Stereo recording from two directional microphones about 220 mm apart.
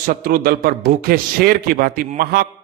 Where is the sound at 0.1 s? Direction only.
40° right (ahead or behind).